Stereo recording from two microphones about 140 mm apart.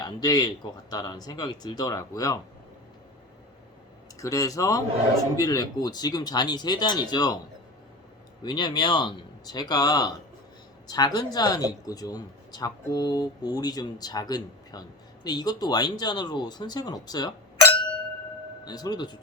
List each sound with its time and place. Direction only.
0.0 s speech: 25° left (ahead or behind)
4.2 s speech: 25° left (ahead or behind)
8.4 s speech: 30° left (ahead or behind)